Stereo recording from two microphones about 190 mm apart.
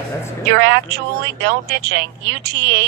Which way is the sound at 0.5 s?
60° right (ahead or behind).